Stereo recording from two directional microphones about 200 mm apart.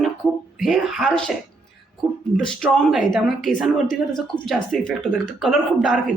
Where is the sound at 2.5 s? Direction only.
Centre (ahead or behind).